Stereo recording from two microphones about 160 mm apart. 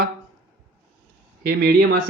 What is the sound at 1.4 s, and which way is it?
Speech, 90° right.